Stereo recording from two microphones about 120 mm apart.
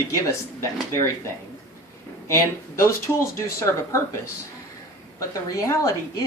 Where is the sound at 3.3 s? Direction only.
25° left (ahead or behind).